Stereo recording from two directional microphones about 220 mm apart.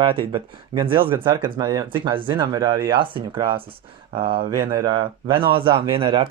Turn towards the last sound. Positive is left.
turn(degrees=-25)  # may be behind; listen again after turning